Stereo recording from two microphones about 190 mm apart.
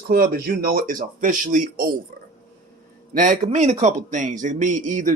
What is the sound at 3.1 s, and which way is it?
A man's voice, 40° right (ahead or behind).